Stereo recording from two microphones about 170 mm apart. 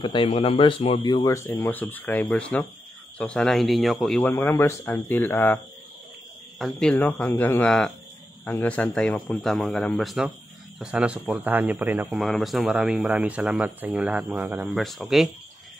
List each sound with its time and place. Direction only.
0.0 s speech: 30° left (ahead or behind); by 4.3 s centre (ahead or behind)
4.3 s speech: 10° left (ahead or behind)
6.6 s speech: 5° left (ahead or behind); by 12.2 s 10° right (ahead or behind)
12.2 s speech: centre (ahead or behind)